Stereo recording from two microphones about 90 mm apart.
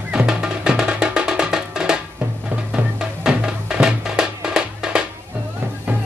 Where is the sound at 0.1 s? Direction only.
10° right (ahead or behind).